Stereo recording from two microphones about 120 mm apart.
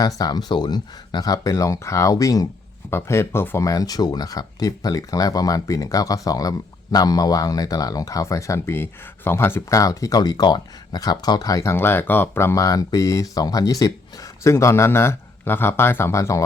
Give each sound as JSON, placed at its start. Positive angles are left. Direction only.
{"t": 0.2, "sound": "speech", "side_deg": 35}